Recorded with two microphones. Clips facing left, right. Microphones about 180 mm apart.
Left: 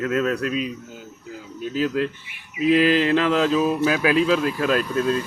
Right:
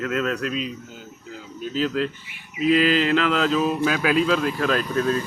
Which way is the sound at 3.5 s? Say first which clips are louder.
Left 2 dB; 10° left (ahead or behind).